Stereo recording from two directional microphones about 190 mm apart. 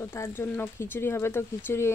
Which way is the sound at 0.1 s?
15° left (ahead or behind).